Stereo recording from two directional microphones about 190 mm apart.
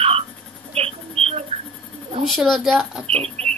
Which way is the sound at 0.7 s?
30° right (ahead or behind).